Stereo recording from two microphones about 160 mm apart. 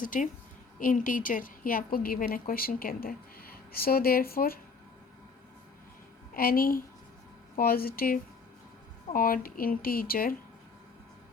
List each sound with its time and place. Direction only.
0.0 s a woman's voice: 55° left (ahead or behind)
6.3 s a woman's voice: 65° left (ahead or behind)